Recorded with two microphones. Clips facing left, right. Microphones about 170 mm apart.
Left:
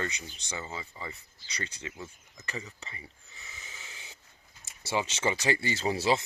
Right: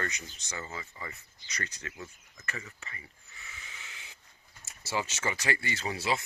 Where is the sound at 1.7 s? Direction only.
30° left (ahead or behind).